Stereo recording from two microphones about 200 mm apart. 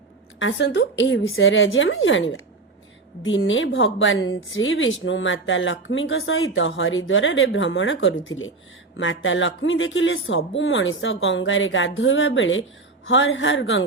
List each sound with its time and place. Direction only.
0.3 s speech: 65° left (ahead or behind)